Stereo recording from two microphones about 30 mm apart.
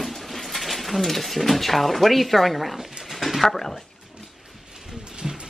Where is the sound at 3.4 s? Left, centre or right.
Centre.